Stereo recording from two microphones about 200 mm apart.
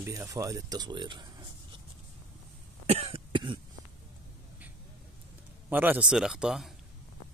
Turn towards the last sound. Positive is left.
turn(degrees=0)  # may be behind; listen again after turning